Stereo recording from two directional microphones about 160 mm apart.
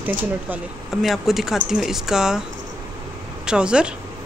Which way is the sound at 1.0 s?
Centre (ahead or behind).